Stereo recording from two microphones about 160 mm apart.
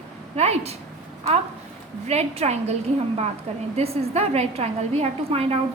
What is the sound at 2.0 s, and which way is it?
Speech, 40° right (ahead or behind).